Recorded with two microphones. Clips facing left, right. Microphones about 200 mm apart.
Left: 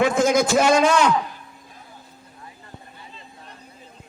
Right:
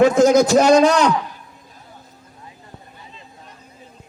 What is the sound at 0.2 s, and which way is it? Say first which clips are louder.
Speech: right 5 dB; 40° right (ahead or behind).